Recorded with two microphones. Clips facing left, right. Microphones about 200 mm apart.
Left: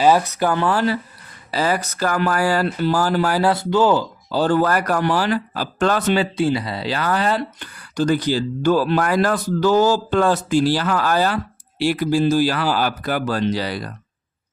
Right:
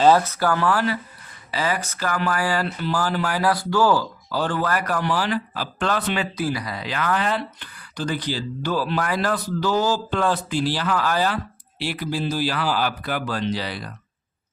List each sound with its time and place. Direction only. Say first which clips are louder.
0.0 s speech: left 1 dB; 15° left (ahead or behind)
1.5 s speech: left 4 dB; 40° left (ahead or behind)
4.5 s speech: left 6 dB; 45° left (ahead or behind)
6.3 s speech: left 6 dB; 25° left (ahead or behind); by 13.9 s 40° left (ahead or behind)